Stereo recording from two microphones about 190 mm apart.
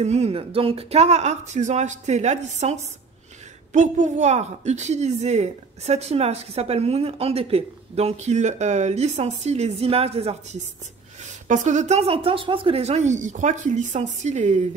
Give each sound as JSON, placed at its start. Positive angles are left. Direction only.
{"t": 0.0, "sound": "a woman's voice", "side_deg": -35}